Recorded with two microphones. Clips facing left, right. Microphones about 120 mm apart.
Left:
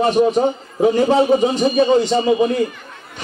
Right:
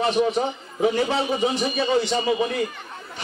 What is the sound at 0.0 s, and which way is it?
A man's voice, 45° left (ahead or behind).